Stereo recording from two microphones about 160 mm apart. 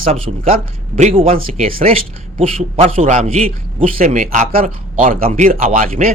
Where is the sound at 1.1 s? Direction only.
35° right (ahead or behind).